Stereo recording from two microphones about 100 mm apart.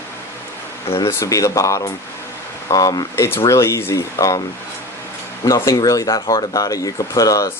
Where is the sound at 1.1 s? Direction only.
30° left (ahead or behind).